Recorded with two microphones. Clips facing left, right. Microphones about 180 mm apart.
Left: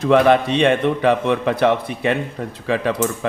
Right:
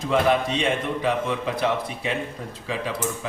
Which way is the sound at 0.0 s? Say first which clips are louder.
Left 7 dB; 65° left (ahead or behind).